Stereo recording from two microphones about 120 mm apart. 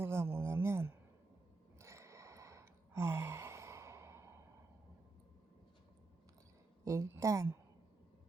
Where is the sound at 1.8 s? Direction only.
25° right (ahead or behind).